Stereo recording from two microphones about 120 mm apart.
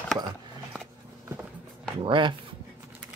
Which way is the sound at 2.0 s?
45° right (ahead or behind).